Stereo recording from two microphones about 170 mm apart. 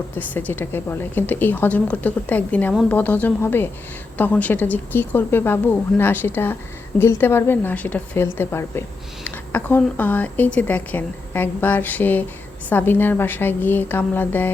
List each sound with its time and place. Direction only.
0.2 s speech: 10° left (ahead or behind)